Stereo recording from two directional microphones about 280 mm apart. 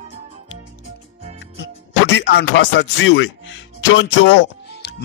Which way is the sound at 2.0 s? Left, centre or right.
Left.